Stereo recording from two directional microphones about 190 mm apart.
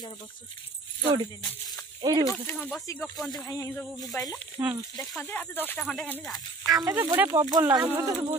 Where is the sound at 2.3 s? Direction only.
10° left (ahead or behind).